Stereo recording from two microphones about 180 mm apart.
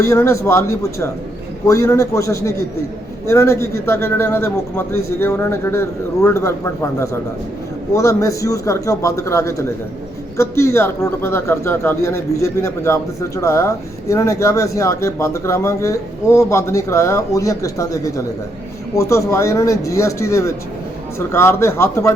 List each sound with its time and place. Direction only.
0.0 s speech: 15° left (ahead or behind)
7.9 s speech: 15° left (ahead or behind)